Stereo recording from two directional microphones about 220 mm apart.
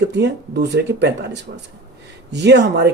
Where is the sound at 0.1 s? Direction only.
50° right (ahead or behind).